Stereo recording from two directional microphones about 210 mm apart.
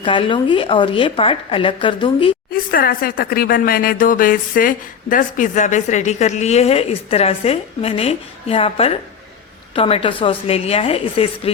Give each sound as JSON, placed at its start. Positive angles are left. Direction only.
{"t": 0.0, "sound": "a woman's voice", "side_deg": 25}
{"t": 2.5, "sound": "a woman's voice", "side_deg": 45}